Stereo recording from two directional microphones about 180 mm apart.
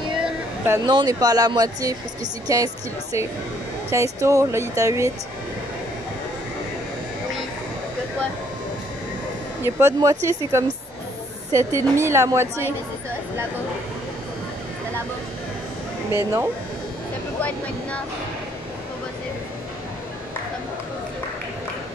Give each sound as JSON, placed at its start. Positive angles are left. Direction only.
{"t": 0.8, "sound": "speech", "side_deg": -20}
{"t": 9.6, "sound": "speech", "side_deg": -15}
{"t": 16.1, "sound": "speech", "side_deg": -15}
{"t": 17.4, "sound": "speech", "side_deg": 10}